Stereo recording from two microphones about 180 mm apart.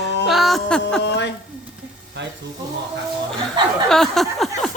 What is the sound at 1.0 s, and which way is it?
Speech, 75° left (ahead or behind).